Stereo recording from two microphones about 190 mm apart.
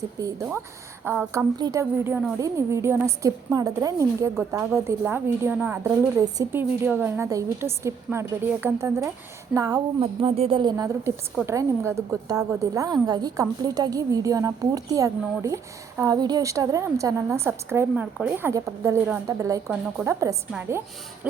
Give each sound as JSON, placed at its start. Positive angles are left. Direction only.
{"t": 0.2, "sound": "a woman's voice", "side_deg": -15}
{"t": 1.5, "sound": "a woman's voice", "side_deg": -20}